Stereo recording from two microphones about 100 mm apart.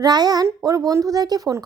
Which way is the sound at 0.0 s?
45° right (ahead or behind).